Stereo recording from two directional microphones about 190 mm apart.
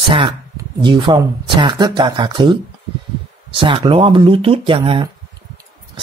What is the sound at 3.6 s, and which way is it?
Speech, 25° right (ahead or behind).